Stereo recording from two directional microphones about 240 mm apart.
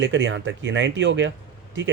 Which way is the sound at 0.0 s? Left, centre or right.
Right.